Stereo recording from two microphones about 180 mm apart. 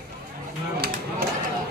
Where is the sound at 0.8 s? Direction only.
55° right (ahead or behind).